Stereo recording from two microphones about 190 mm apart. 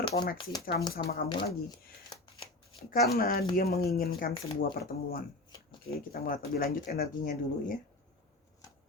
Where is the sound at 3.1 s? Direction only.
50° left (ahead or behind).